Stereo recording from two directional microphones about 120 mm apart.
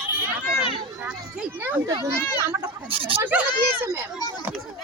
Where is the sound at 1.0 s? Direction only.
10° right (ahead or behind).